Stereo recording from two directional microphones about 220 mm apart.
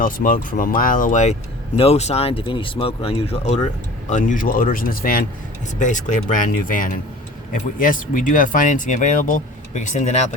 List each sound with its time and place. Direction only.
0.0 s speech: 40° left (ahead or behind)